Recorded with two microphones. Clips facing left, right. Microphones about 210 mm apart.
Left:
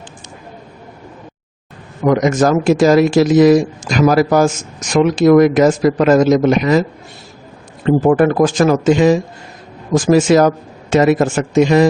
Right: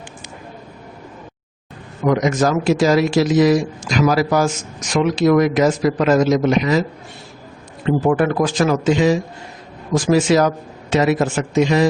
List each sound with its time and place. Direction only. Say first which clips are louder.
2.0 s speech: left 4 dB; 50° left (ahead or behind)
7.9 s speech: left 5 dB; 45° left (ahead or behind)